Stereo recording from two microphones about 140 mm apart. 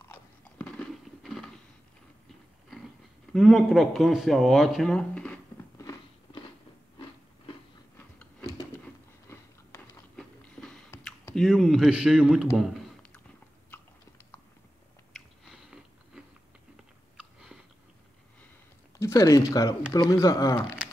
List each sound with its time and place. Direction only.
0.1 s crunch: 10° left (ahead or behind)
3.3 s speech: centre (ahead or behind)
5.8 s biting: 25° left (ahead or behind)
10.6 s squish: centre (ahead or behind)
10.9 s a sound: 20° left (ahead or behind)
11.3 s speech: centre (ahead or behind)
15.1 s biting: 5° right (ahead or behind)
17.2 s chewing: 5° right (ahead or behind)
18.9 s speech: 20° left (ahead or behind)